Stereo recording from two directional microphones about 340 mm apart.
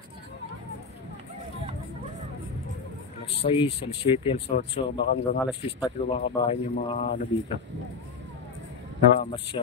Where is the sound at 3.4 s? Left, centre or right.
Centre.